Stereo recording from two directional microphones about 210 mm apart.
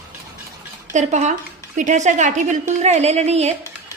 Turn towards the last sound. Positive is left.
turn(degrees=-30)  # may be behind; listen again after turning